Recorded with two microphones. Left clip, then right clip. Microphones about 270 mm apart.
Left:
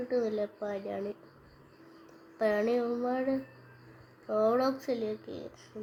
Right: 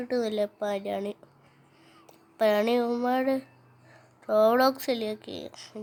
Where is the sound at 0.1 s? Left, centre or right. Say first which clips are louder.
Right 4 dB; right.